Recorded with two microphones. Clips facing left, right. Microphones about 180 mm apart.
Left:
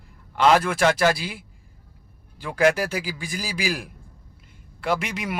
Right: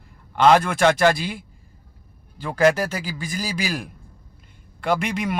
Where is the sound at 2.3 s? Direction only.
10° left (ahead or behind).